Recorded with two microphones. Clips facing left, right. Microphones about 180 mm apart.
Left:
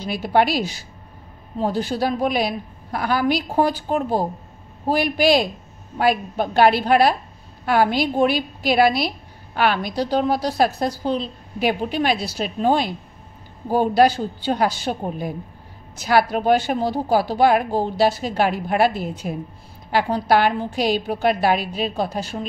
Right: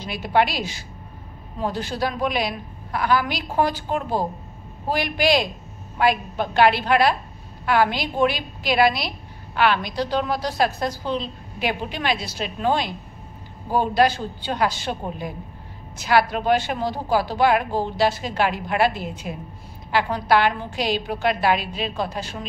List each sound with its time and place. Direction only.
0.1 s a woman's voice: 40° left (ahead or behind)
2.9 s a woman's voice: 40° left (ahead or behind)